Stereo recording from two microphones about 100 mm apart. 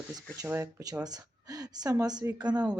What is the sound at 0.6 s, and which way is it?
Speech, 40° right (ahead or behind).